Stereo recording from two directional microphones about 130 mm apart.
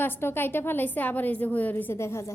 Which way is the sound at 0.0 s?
15° left (ahead or behind).